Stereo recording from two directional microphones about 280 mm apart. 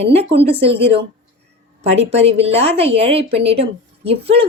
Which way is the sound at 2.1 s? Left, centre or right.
Right.